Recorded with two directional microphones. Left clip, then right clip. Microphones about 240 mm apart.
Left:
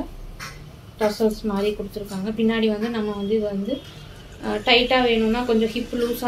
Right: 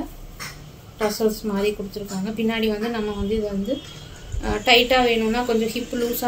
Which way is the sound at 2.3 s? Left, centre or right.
Centre.